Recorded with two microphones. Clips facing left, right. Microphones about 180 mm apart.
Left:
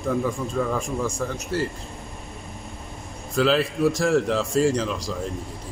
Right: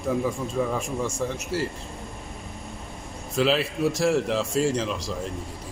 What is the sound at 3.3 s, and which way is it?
Speech, centre (ahead or behind).